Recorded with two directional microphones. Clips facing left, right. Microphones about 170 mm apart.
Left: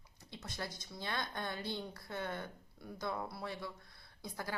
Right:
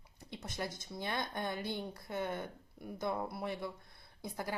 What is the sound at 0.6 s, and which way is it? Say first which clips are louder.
A woman's voice: right 4 dB; 20° right (ahead or behind).